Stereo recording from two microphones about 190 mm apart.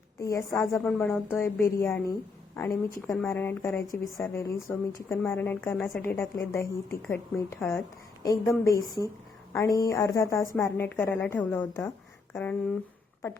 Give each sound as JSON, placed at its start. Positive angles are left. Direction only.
{"t": 0.2, "sound": "a woman's voice", "side_deg": 15}